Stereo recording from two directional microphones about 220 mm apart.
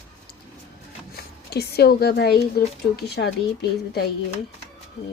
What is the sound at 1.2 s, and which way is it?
A woman's voice, 45° left (ahead or behind).